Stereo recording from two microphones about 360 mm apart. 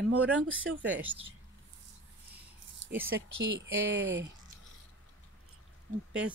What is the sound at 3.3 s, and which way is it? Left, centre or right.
Speech, right.